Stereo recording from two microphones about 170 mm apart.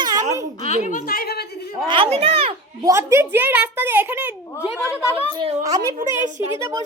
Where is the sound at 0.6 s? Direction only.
40° left (ahead or behind); by 1.7 s 70° left (ahead or behind).